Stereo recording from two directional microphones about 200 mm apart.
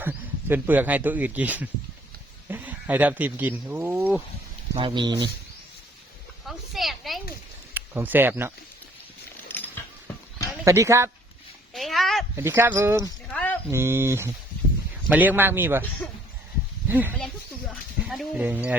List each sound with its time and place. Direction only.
0.0 s speech: 10° right (ahead or behind)
4.7 s speech: 20° right (ahead or behind)
6.4 s a sound: centre (ahead or behind)
7.7 s speech: 10° right (ahead or behind)
10.6 s speech: 15° right (ahead or behind)
11.7 s a sound: centre (ahead or behind)
12.4 s speech: 10° right (ahead or behind)
13.3 s a sound: 5° left (ahead or behind)
13.7 s speech: 15° right (ahead or behind)
16.9 s speech: 10° right (ahead or behind)